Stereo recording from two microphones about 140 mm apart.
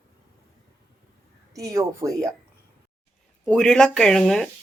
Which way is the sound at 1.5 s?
25° right (ahead or behind).